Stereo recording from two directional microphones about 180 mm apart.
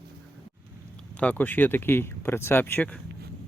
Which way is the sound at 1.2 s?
10° left (ahead or behind).